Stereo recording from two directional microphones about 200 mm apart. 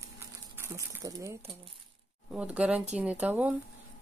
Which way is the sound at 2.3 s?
5° right (ahead or behind).